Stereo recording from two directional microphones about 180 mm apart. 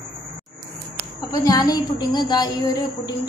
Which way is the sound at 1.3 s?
20° left (ahead or behind).